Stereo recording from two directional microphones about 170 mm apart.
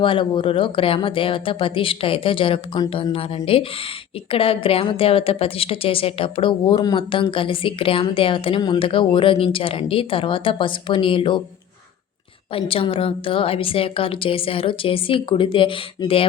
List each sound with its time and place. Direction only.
0.0 s a woman's voice: 30° left (ahead or behind)
12.5 s a woman's voice: 30° left (ahead or behind)